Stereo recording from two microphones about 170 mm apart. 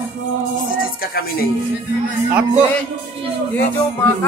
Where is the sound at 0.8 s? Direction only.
60° left (ahead or behind).